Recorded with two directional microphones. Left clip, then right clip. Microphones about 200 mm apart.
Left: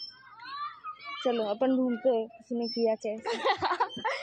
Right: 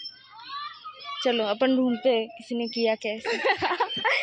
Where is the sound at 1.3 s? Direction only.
5° right (ahead or behind).